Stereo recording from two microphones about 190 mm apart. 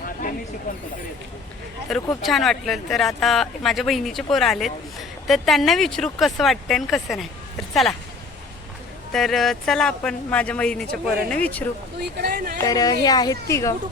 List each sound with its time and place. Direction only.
1.9 s speech: centre (ahead or behind)
9.1 s speech: centre (ahead or behind)
12.1 s speech: 50° right (ahead or behind)
12.5 s a woman's voice: 20° left (ahead or behind)